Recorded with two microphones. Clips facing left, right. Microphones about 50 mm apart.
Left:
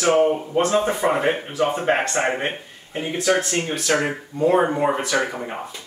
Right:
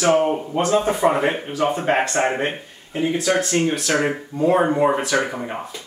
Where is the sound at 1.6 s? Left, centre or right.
Left.